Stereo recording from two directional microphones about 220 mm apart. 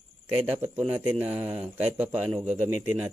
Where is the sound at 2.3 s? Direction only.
30° right (ahead or behind).